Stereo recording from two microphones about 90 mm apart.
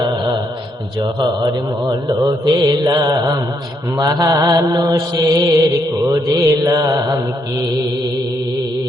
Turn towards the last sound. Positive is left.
turn(degrees=-40)  # may be behind; listen again after turning